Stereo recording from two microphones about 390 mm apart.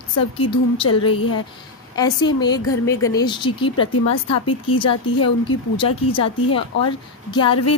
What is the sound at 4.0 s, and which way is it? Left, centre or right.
Speech, left.